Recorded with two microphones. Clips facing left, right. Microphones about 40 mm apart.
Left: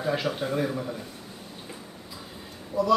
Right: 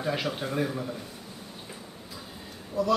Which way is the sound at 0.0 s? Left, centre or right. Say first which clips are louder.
Left 2 dB; centre.